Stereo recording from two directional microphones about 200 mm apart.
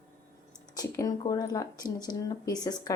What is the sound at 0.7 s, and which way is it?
Speech, 20° left (ahead or behind).